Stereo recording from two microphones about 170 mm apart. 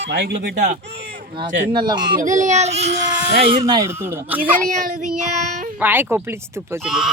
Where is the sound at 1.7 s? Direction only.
25° right (ahead or behind).